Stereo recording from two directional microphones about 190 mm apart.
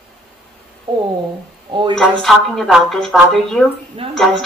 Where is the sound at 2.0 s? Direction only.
Centre (ahead or behind).